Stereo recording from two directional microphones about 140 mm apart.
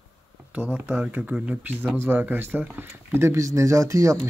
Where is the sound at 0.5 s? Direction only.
10° right (ahead or behind).